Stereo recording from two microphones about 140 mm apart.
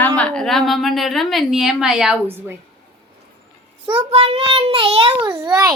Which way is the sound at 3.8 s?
40° right (ahead or behind).